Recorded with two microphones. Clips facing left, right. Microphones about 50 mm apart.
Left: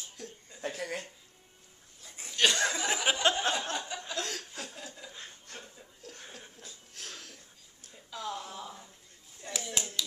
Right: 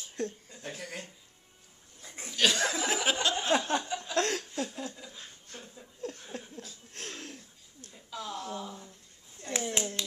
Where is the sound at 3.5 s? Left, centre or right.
Right.